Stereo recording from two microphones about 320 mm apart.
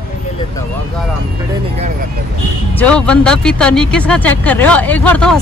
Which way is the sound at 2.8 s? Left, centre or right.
Centre.